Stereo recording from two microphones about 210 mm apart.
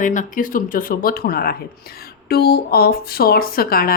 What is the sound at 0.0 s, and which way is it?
A woman's voice, 35° left (ahead or behind).